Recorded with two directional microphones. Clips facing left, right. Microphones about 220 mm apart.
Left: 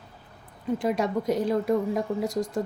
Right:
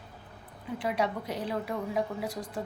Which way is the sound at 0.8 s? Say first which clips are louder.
Left 4 dB; 45° left (ahead or behind).